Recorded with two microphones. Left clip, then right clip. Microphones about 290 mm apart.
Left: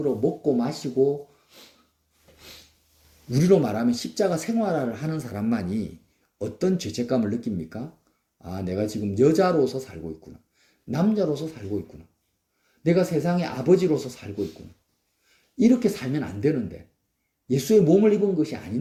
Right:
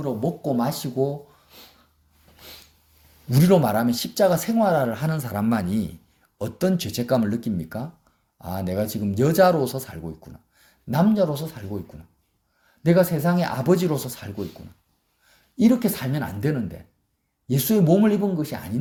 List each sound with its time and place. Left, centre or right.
0.4 s speech: right
3.2 s speech: right
12.8 s speech: right
15.5 s speech: right